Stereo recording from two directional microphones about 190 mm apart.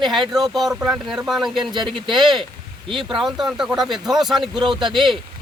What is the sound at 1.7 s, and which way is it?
Speech, 25° right (ahead or behind).